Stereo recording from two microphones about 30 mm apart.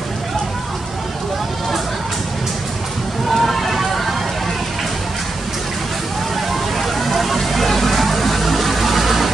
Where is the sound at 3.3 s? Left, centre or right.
Centre.